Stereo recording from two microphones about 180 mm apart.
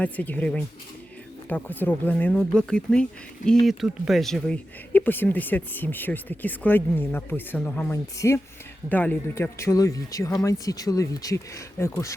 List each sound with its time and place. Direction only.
0.0 s speech: 10° left (ahead or behind)